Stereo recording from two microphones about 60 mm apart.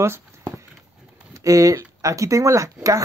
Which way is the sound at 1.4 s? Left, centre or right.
Right.